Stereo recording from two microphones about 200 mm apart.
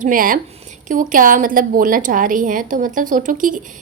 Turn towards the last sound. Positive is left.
turn(degrees=-40)  # may be behind; listen again after turning